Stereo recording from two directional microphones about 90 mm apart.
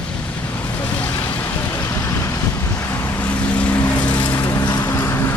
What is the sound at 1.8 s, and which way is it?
Vehicle, 30° left (ahead or behind).